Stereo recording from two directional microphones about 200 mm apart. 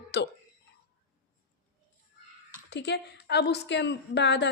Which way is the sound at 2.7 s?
60° left (ahead or behind).